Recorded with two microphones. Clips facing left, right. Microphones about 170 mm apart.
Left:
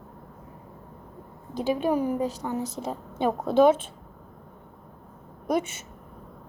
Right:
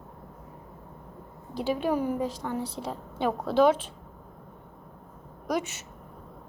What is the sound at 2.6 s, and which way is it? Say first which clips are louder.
Speech: left 2 dB; 45° left (ahead or behind).